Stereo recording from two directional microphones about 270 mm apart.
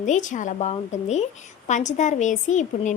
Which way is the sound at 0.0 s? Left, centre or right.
Left.